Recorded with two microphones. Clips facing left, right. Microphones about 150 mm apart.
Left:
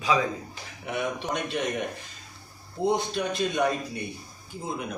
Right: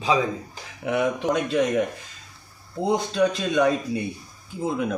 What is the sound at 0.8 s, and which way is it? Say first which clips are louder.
Speech: right 7 dB; 90° right.